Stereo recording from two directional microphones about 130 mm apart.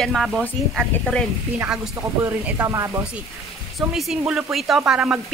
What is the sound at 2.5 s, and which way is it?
Speech, 25° right (ahead or behind).